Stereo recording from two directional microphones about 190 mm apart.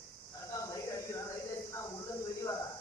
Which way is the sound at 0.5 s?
15° left (ahead or behind).